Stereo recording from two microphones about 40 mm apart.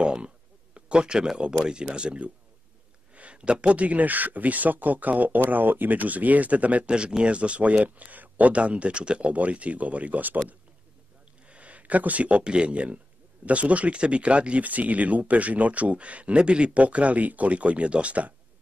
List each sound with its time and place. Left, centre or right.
0.0 s a sound: right
1.2 s speech: centre; by 6.9 s right
6.9 s speech: right
9.3 s speech: right
11.4 s speech: right